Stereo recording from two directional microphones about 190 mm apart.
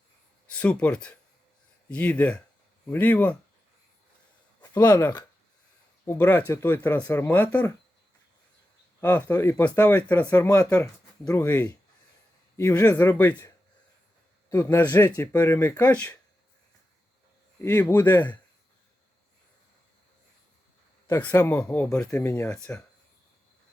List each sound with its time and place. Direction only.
0.5 s speech: 5° left (ahead or behind)
4.7 s speech: 20° left (ahead or behind)
9.0 s speech: 10° left (ahead or behind)
14.5 s speech: 15° left (ahead or behind)
17.6 s speech: 15° left (ahead or behind)
21.1 s speech: 10° left (ahead or behind)